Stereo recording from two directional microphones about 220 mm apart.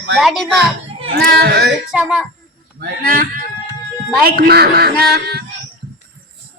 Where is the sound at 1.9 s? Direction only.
Centre (ahead or behind).